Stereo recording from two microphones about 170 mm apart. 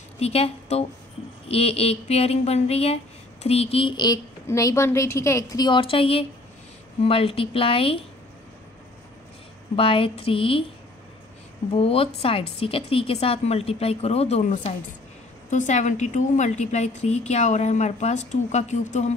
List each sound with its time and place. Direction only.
0.2 s a woman's voice: 35° left (ahead or behind)
9.8 s speech: 30° left (ahead or behind)
11.7 s a woman's voice: 35° left (ahead or behind)